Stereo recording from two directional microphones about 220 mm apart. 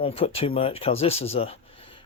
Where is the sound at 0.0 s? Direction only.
25° left (ahead or behind).